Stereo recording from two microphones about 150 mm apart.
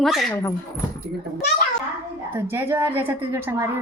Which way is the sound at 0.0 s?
Centre (ahead or behind).